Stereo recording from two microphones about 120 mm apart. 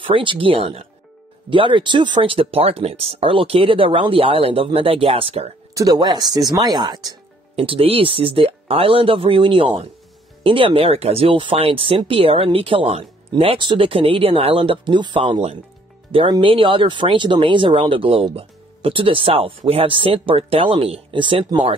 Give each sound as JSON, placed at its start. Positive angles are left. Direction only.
{"t": 0.0, "sound": "speech", "side_deg": -45}
{"t": 5.8, "sound": "speech", "side_deg": -35}
{"t": 7.5, "sound": "speech", "side_deg": -50}